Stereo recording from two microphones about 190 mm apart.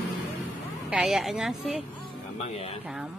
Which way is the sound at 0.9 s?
Centre (ahead or behind).